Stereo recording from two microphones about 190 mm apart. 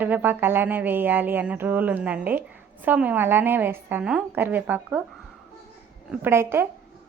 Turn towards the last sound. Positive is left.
turn(degrees=-10)  # may be behind; listen again after turning